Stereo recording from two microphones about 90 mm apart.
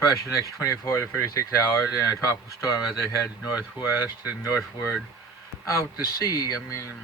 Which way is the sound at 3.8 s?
20° right (ahead or behind).